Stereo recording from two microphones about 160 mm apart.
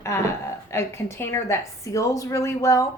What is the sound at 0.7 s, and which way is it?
A woman's voice, 15° left (ahead or behind).